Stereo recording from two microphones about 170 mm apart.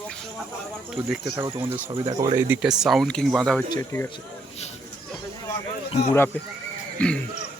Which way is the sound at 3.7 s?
15° left (ahead or behind).